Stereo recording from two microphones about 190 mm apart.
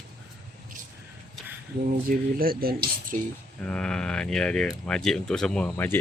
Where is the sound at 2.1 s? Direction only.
50° right (ahead or behind).